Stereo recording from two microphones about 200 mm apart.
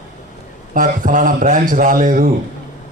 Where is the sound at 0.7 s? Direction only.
40° right (ahead or behind).